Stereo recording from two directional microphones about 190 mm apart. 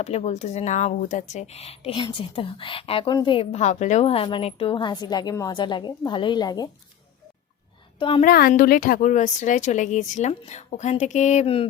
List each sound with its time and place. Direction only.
0.0 s speech: 35° left (ahead or behind)
7.9 s a woman's voice: 25° left (ahead or behind)
8.2 s a woman's voice: 50° left (ahead or behind); by 11.6 s 35° left (ahead or behind)